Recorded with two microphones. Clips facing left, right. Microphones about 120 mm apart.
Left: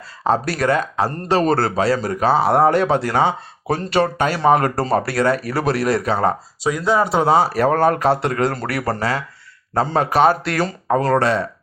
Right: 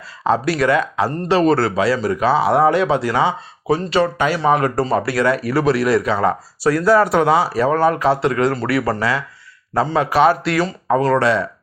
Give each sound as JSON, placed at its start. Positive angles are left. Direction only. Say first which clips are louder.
{"t": 0.3, "sound": "speech", "louder": "right 2 dB", "side_deg": 45}
{"t": 6.6, "sound": "speech", "louder": "right 5 dB", "side_deg": 20}
{"t": 7.3, "sound": "speech", "louder": "left 1 dB", "side_deg": 55}